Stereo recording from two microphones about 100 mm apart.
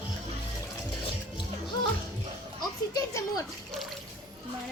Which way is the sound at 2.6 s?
35° left (ahead or behind).